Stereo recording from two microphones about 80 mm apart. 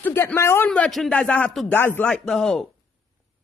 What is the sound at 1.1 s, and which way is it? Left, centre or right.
Speech, centre.